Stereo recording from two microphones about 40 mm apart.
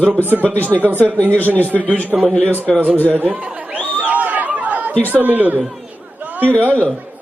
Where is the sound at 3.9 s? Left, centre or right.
Right.